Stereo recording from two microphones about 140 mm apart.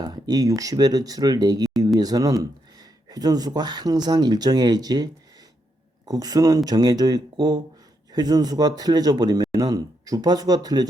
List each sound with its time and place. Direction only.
0.0 s speech: 25° right (ahead or behind)
6.1 s speech: 25° right (ahead or behind)